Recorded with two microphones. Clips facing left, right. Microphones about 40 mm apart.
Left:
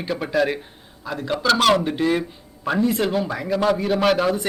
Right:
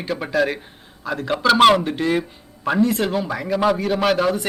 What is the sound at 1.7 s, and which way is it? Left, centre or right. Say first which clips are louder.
Speech: right 1 dB; centre.